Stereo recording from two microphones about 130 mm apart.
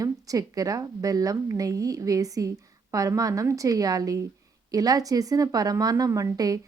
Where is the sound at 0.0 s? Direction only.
25° right (ahead or behind).